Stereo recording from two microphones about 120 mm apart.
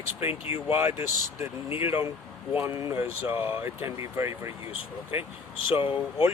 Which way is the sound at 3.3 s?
20° right (ahead or behind).